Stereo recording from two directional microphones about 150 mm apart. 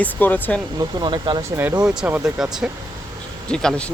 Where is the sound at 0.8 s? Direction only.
30° right (ahead or behind); by 3.9 s 5° left (ahead or behind).